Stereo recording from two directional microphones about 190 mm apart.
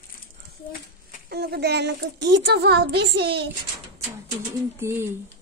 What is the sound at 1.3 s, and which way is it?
A child's voice, 60° right (ahead or behind).